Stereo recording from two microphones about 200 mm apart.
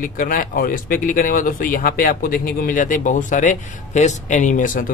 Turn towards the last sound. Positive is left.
turn(degrees=40)  # may be behind; listen again after turning